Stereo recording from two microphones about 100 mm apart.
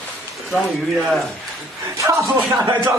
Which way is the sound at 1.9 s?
30° right (ahead or behind).